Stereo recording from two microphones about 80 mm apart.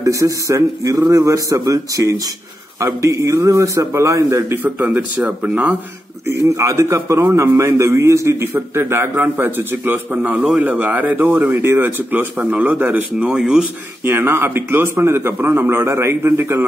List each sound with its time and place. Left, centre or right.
0.0 s a man's voice: right
4.6 s speech: right
6.2 s a man's voice: right
13.2 s speech: centre
14.0 s a man's voice: right